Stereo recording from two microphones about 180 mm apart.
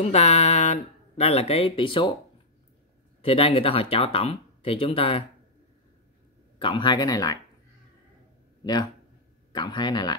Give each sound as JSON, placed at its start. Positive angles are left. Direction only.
{"t": 0.0, "sound": "speech", "side_deg": 35}
{"t": 3.2, "sound": "speech", "side_deg": 30}
{"t": 6.6, "sound": "speech", "side_deg": 25}
{"t": 9.6, "sound": "speech", "side_deg": 25}